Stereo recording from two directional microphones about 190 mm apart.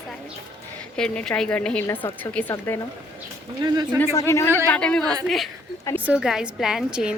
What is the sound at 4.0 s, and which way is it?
Speech, 15° left (ahead or behind).